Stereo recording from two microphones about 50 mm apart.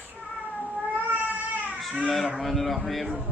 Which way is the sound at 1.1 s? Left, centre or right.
Right.